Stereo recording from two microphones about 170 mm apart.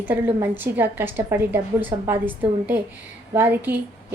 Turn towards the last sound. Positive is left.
turn(degrees=-10)  # may be behind; listen again after turning